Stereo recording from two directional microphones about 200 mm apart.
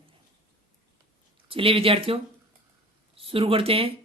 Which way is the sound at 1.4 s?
25° right (ahead or behind).